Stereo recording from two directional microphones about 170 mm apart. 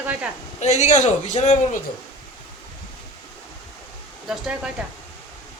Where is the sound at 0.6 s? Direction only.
45° left (ahead or behind).